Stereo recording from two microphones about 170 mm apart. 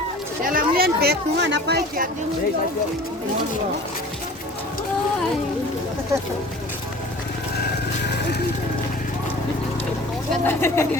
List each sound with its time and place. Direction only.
0.4 s speech: 55° right (ahead or behind); by 1.8 s 85° right
10.4 s speech: 15° left (ahead or behind)